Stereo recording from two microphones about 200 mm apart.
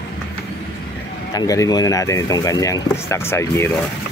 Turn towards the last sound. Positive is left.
turn(degrees=15)  # may be behind; listen again after turning